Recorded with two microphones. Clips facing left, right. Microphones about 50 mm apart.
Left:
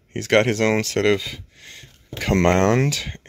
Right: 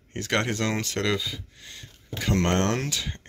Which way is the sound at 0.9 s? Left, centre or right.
Left.